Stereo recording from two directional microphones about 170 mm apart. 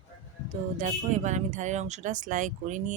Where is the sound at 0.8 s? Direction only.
45° right (ahead or behind).